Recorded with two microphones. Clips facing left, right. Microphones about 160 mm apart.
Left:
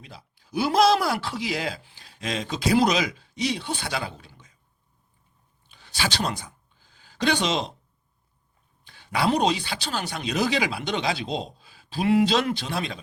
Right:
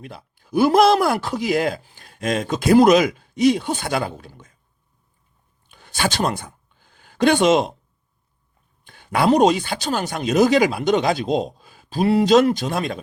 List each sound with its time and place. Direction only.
0.0 s speech: 55° right (ahead or behind)
5.6 s a sound: 50° right (ahead or behind)
8.8 s speech: 50° right (ahead or behind)